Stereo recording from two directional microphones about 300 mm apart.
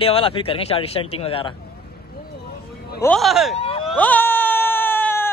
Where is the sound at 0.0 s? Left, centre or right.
Centre.